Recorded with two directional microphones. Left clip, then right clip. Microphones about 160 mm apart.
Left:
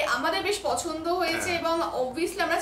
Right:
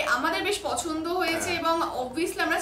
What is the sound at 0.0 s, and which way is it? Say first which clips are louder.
A woman's voice: even; 15° right (ahead or behind).